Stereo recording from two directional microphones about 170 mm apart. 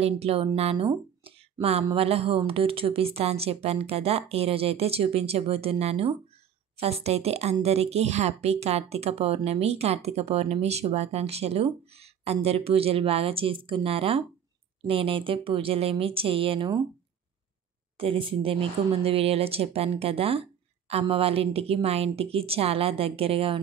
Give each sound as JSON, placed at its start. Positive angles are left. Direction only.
{"t": 0.0, "sound": "speech", "side_deg": -35}
{"t": 0.8, "sound": "a sound", "side_deg": -35}
{"t": 1.9, "sound": "speech", "side_deg": -35}
{"t": 17.9, "sound": "speech", "side_deg": -35}